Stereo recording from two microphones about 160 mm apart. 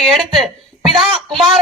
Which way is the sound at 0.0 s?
Centre (ahead or behind).